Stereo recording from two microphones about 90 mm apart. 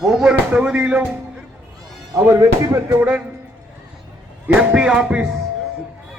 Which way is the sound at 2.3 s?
35° right (ahead or behind).